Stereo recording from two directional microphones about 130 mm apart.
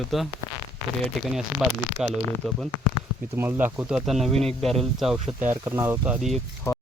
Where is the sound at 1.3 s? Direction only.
5° right (ahead or behind).